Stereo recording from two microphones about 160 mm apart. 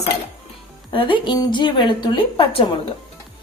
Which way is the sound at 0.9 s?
30° left (ahead or behind).